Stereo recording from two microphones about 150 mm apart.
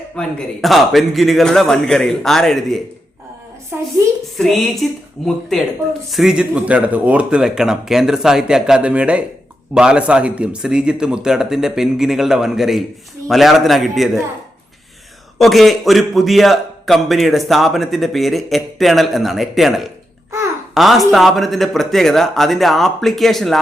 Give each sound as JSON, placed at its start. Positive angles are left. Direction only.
{"t": 0.2, "sound": "a man's voice", "side_deg": 0}
{"t": 3.7, "sound": "a woman's voice", "side_deg": -15}
{"t": 4.4, "sound": "a man's voice", "side_deg": 0}
{"t": 15.4, "sound": "a man's voice", "side_deg": 0}